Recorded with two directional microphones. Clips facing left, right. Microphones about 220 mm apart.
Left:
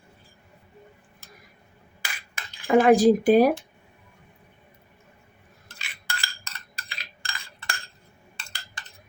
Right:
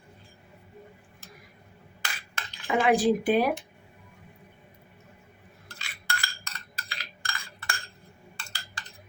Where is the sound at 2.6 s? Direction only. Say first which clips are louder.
Left 6 dB; 45° left (ahead or behind).